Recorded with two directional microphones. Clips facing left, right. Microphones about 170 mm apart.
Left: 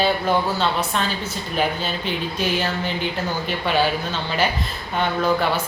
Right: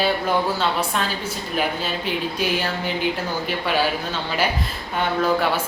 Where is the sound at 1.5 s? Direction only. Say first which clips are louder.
Left 1 dB; 5° right (ahead or behind).